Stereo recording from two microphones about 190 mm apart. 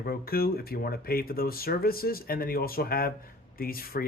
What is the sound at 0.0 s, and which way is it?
Speech, 50° left (ahead or behind).